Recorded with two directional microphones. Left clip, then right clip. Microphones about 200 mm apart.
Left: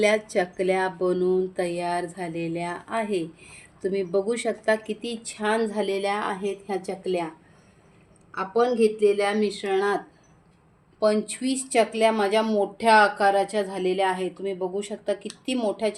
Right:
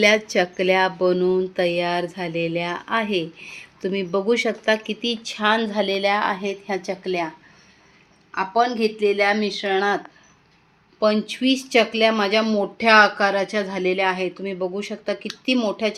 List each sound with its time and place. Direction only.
0.0 s speech: 30° right (ahead or behind)
8.4 s speech: 25° right (ahead or behind)
11.0 s speech: 30° right (ahead or behind)